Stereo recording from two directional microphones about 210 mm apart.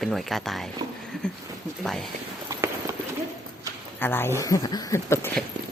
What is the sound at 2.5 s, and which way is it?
Run, 15° right (ahead or behind).